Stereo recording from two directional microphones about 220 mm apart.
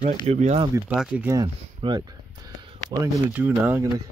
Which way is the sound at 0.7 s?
5° right (ahead or behind).